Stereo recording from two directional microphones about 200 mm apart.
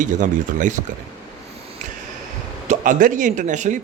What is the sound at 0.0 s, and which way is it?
Speech, 40° right (ahead or behind).